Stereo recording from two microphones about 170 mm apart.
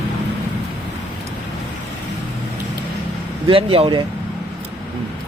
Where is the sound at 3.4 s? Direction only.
30° right (ahead or behind).